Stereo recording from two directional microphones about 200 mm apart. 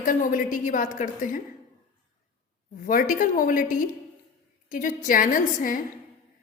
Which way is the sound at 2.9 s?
40° left (ahead or behind).